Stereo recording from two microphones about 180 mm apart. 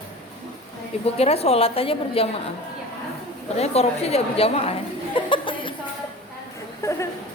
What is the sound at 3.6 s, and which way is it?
Speech, 35° left (ahead or behind).